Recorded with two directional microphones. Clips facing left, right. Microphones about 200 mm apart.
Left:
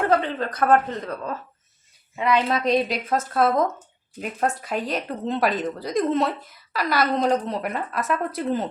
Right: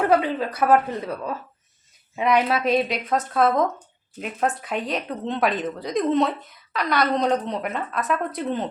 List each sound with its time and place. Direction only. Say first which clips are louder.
0.1 s a woman's voice: right 2 dB; 10° right (ahead or behind)
2.5 s speech: even; 5° right (ahead or behind)